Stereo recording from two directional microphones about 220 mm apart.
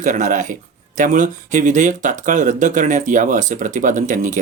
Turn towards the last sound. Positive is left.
turn(degrees=-35)  # may be behind; listen again after turning